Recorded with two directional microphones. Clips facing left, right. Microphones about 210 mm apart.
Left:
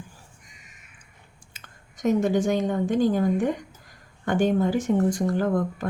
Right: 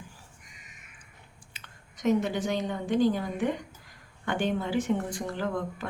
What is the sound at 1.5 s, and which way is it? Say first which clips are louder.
A woman's voice: left 3 dB; 45° left (ahead or behind).